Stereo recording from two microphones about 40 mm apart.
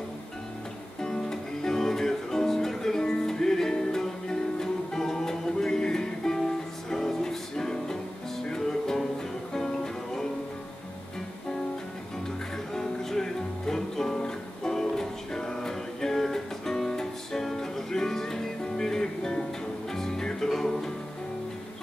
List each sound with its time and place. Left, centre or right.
1.0 s music: centre
12.7 s music: centre